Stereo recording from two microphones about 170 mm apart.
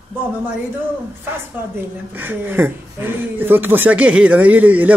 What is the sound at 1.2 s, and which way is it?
A woman's voice, 10° right (ahead or behind).